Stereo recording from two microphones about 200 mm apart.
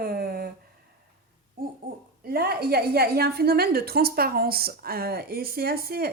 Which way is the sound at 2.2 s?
50° right (ahead or behind).